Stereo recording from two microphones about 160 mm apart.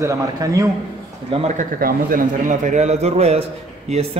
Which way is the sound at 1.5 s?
55° right (ahead or behind).